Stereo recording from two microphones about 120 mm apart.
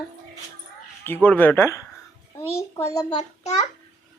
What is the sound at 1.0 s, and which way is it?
A child's voice, 15° left (ahead or behind).